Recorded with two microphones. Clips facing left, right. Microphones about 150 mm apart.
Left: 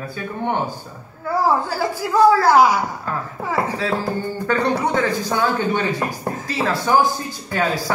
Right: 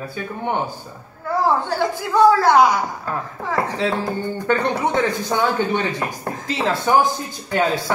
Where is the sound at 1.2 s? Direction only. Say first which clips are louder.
Even; 5° left (ahead or behind).